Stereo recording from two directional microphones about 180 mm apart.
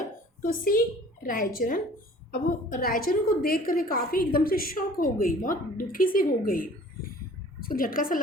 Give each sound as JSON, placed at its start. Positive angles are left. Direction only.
{"t": 0.4, "sound": "a woman's voice", "side_deg": 55}